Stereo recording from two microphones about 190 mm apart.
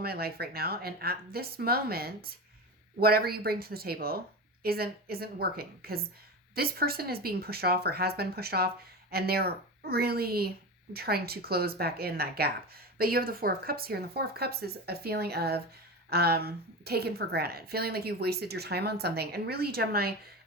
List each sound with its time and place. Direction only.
0.0 s a woman's voice: 55° right (ahead or behind)